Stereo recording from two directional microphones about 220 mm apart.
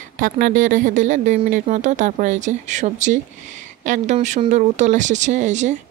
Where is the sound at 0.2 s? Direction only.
35° right (ahead or behind).